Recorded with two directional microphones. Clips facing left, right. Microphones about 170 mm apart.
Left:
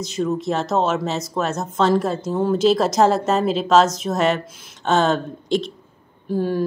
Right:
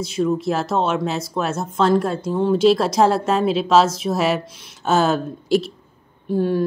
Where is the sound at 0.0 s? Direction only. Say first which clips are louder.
Right 2 dB; 5° right (ahead or behind).